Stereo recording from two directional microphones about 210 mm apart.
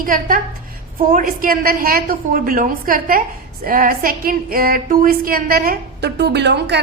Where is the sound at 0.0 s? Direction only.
40° right (ahead or behind).